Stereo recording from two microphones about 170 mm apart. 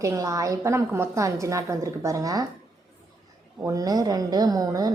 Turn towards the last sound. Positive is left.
turn(degrees=-20)  # may be behind; listen again after turning